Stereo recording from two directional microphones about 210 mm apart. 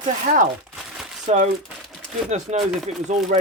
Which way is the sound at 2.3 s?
30° right (ahead or behind).